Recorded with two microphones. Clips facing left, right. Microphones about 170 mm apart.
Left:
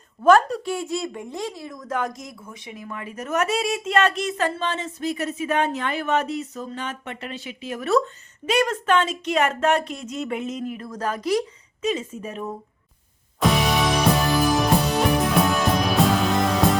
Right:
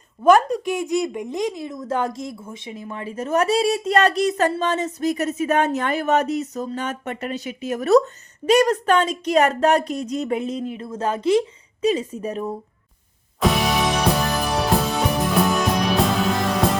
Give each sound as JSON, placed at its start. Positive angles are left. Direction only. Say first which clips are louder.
{"t": 0.2, "sound": "speech", "louder": "right 1 dB", "side_deg": -10}
{"t": 13.4, "sound": "music", "louder": "right 1 dB", "side_deg": 0}